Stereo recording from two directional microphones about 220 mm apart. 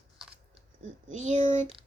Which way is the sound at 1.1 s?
35° right (ahead or behind).